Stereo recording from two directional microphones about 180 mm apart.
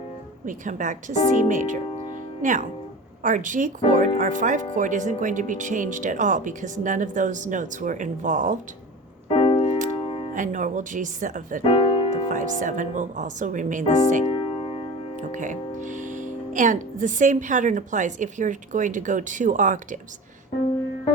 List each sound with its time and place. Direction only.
0.4 s speech: 45° right (ahead or behind)
9.3 s music: 30° left (ahead or behind)
10.3 s speech: 45° right (ahead or behind)
11.6 s music: 30° left (ahead or behind)
12.3 s speech: 45° right (ahead or behind)
14.3 s music: 30° left (ahead or behind)
15.3 s speech: 45° right (ahead or behind)